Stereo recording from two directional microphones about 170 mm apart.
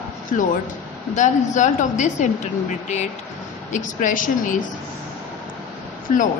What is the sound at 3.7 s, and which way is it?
Speech, 50° left (ahead or behind).